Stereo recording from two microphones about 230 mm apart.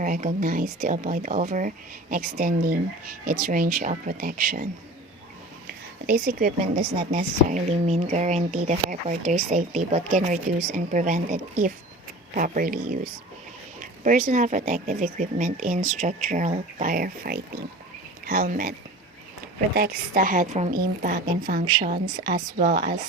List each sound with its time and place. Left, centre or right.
0.0 s speech: right
19.7 s speech: right